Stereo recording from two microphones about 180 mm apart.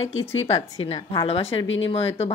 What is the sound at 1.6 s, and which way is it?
Speech, 90° left.